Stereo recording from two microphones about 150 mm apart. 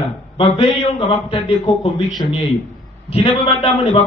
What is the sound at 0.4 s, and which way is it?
A man's voice, 40° left (ahead or behind).